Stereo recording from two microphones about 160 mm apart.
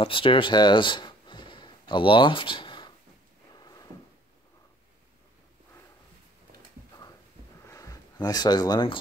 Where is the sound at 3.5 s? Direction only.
25° left (ahead or behind).